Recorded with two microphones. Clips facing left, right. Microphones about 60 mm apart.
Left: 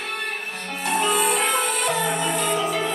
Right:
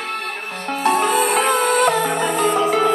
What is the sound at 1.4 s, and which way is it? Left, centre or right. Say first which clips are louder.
Music: right 7 dB; right.